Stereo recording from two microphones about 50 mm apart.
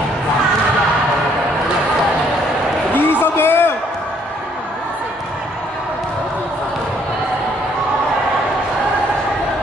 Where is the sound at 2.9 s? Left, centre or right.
Left.